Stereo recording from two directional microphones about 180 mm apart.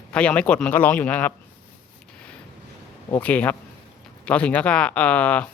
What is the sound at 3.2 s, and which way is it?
Speech, 10° left (ahead or behind).